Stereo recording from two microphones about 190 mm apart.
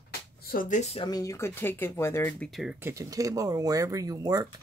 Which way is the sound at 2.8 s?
15° right (ahead or behind).